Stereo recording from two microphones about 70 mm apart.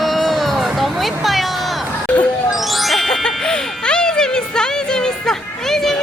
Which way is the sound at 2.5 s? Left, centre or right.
Centre.